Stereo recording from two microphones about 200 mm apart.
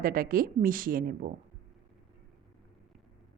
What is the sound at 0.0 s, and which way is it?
A woman's voice, 45° right (ahead or behind).